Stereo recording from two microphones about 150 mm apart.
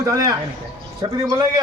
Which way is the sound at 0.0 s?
25° right (ahead or behind).